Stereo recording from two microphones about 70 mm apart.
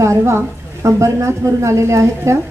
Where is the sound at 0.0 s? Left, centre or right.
Right.